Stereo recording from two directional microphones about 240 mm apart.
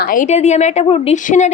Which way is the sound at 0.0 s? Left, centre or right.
Left.